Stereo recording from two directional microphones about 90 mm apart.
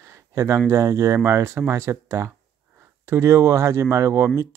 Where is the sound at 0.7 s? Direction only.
35° right (ahead or behind).